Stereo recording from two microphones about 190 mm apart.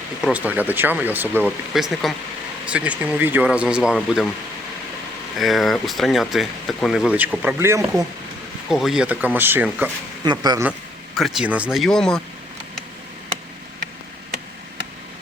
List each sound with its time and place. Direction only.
0.2 s speech: 5° right (ahead or behind)
5.4 s speech: centre (ahead or behind)
8.7 s speech: centre (ahead or behind)
10.2 s speech: 20° right (ahead or behind)
11.2 s speech: centre (ahead or behind)